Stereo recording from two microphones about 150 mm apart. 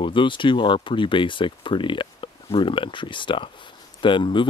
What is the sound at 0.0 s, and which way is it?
Speech, 35° left (ahead or behind).